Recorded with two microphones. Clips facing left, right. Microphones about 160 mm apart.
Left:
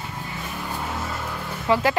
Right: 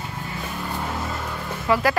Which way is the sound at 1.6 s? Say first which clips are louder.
Even; 25° left (ahead or behind).